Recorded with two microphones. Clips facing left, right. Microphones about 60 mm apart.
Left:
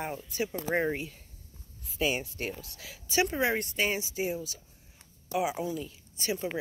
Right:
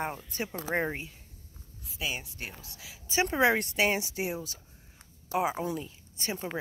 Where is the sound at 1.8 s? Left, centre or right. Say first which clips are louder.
Left 6 dB; centre.